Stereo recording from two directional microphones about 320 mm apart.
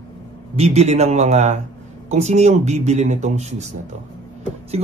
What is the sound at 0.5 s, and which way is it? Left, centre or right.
Speech, centre.